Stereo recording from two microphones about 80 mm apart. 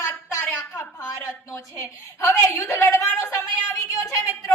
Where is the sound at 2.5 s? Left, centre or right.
Left.